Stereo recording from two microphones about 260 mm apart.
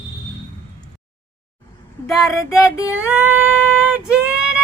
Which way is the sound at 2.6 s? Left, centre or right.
Centre.